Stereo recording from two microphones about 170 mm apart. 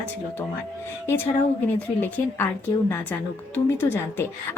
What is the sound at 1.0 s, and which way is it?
A woman's voice, 15° left (ahead or behind).